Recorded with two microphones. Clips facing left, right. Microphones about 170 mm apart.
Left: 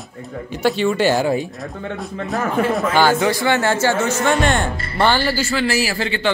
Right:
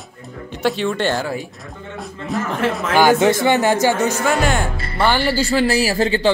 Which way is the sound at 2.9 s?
15° right (ahead or behind).